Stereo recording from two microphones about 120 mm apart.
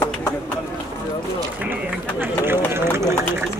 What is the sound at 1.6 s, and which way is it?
Speech, 15° right (ahead or behind).